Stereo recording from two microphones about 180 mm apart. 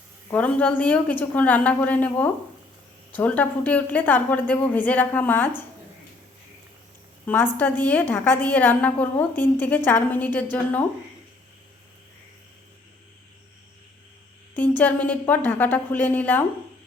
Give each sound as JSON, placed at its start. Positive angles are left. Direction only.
{"t": 0.3, "sound": "a woman's voice", "side_deg": 10}
{"t": 7.3, "sound": "a woman's voice", "side_deg": 10}
{"t": 14.5, "sound": "a woman's voice", "side_deg": 10}